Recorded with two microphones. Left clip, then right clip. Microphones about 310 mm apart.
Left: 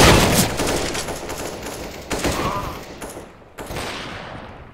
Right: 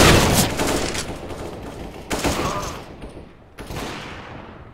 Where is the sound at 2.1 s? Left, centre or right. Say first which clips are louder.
Even; centre.